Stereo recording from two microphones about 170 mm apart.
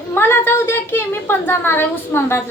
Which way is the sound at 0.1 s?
15° left (ahead or behind).